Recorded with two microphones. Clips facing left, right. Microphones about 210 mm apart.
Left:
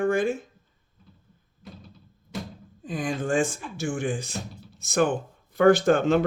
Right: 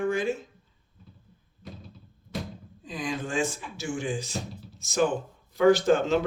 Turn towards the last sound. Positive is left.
turn(degrees=55)  # may be behind; listen again after turning